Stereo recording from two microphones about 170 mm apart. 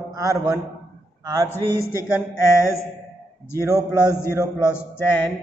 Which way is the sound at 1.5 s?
15° left (ahead or behind).